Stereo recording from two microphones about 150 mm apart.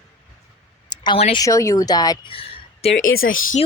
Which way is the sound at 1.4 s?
20° left (ahead or behind).